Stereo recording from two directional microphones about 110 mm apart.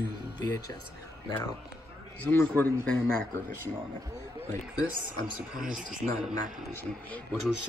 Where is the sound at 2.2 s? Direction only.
20° left (ahead or behind).